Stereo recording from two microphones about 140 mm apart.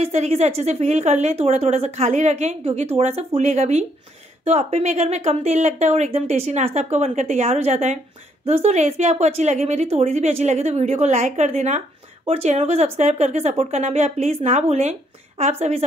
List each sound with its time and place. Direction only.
0.0 s speech: 50° right (ahead or behind)